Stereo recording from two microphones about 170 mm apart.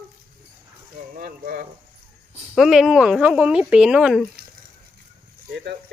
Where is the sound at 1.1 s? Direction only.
55° right (ahead or behind).